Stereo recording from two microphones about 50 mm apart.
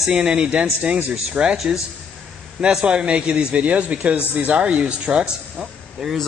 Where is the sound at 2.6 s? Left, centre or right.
Right.